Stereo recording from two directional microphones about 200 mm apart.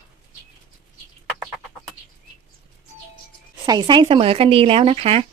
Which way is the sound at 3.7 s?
20° right (ahead or behind).